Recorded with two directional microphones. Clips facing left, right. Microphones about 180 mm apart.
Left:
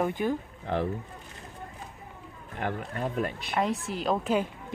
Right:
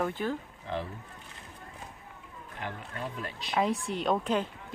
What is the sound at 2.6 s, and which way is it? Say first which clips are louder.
Speech: left 7 dB; 55° left (ahead or behind).